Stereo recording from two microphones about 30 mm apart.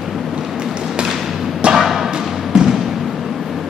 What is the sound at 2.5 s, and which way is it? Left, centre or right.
Basketball bounce, centre.